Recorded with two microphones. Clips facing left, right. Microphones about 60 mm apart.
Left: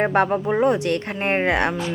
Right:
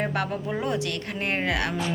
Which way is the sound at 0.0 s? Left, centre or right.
Left.